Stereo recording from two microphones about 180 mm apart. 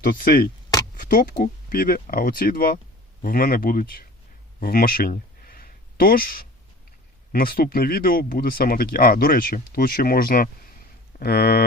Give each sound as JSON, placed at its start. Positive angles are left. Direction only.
{"t": 0.0, "sound": "speech", "side_deg": 50}
{"t": 4.6, "sound": "a sound", "side_deg": 55}
{"t": 7.3, "sound": "speech", "side_deg": 55}